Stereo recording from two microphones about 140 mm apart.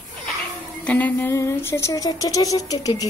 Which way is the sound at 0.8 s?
10° left (ahead or behind).